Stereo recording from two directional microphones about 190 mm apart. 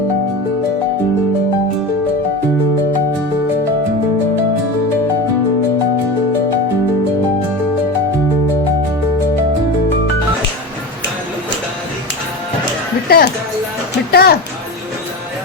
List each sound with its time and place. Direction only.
13.1 s music: 55° left (ahead or behind)